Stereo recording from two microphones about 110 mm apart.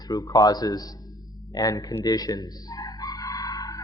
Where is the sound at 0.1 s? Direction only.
35° left (ahead or behind).